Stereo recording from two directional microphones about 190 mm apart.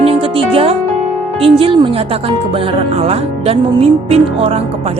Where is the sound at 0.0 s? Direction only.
30° right (ahead or behind).